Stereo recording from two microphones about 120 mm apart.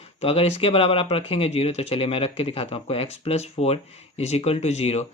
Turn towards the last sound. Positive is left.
turn(degrees=60)  # may be behind; listen again after turning